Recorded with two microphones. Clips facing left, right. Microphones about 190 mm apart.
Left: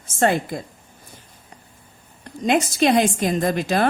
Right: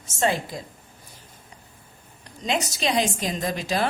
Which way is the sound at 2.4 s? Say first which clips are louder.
Left 8 dB; 55° left (ahead or behind).